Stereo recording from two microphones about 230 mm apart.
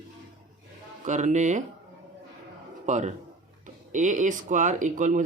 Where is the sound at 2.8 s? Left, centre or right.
Right.